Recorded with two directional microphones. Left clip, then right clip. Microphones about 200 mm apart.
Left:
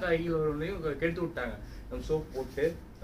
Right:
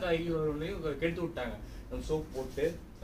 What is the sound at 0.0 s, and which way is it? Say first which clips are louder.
A man's voice: left 2 dB; centre (ahead or behind).